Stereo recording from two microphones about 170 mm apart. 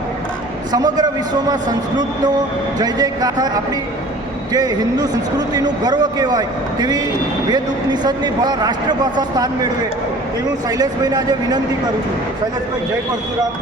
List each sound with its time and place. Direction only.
0.7 s a man's voice: 25° right (ahead or behind)
4.5 s a man's voice: 25° right (ahead or behind)
10.7 s a man's voice: 20° right (ahead or behind)